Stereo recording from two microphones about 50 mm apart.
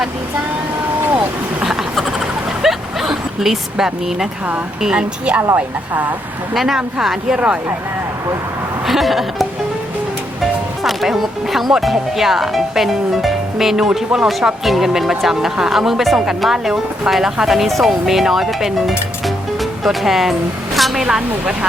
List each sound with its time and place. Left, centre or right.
1.0 s vehicle: right
1.6 s a sound: centre
4.8 s a woman's voice: centre
6.5 s speech: centre
7.3 s a woman's voice: right
8.9 s speech: centre
10.8 s speech: centre